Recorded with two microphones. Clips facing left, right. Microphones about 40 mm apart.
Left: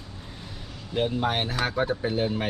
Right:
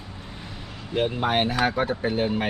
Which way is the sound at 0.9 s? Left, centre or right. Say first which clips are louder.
Right 2 dB; centre.